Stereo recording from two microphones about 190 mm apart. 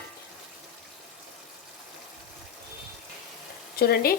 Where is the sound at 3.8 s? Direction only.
55° left (ahead or behind).